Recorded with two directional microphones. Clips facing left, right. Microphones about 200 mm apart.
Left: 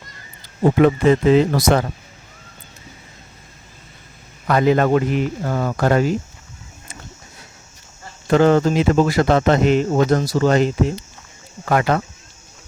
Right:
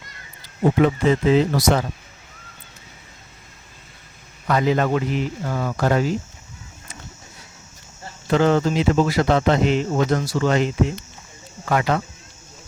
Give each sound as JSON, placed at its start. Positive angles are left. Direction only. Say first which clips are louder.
{"t": 0.8, "sound": "a man's voice", "louder": "left 5 dB", "side_deg": 55}
{"t": 4.4, "sound": "a man's voice", "louder": "left 4 dB", "side_deg": 55}
{"t": 8.3, "sound": "speech", "louder": "left 4 dB", "side_deg": 50}
{"t": 11.6, "sound": "speech", "louder": "left 3 dB", "side_deg": 50}